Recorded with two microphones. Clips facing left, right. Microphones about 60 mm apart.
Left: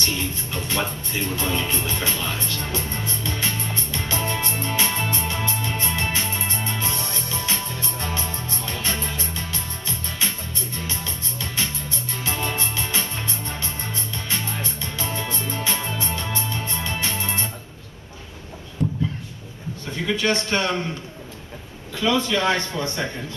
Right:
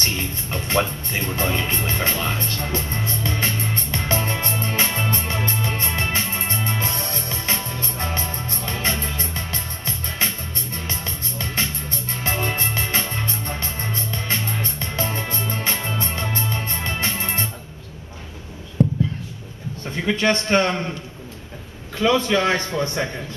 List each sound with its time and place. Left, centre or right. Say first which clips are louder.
0.0 s music: even; right
18.8 s a sound: right 5 dB; right
20.1 s a man's voice: right 3 dB; right
22.0 s a man's voice: right 2 dB; right